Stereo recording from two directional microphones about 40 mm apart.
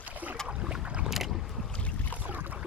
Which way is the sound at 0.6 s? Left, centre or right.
Right.